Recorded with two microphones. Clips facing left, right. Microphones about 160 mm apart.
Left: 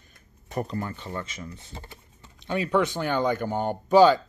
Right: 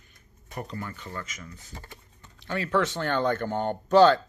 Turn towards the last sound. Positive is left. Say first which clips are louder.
# left 1 dB
turn(degrees=10)  # may be behind; listen again after turning